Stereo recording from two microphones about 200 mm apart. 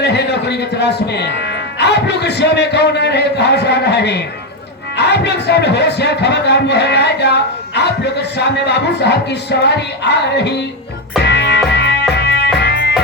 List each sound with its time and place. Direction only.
0.0 s music: 55° left (ahead or behind)
2.0 s speech: 60° left (ahead or behind)
8.6 s speech: 55° left (ahead or behind)
11.3 s music: 60° left (ahead or behind)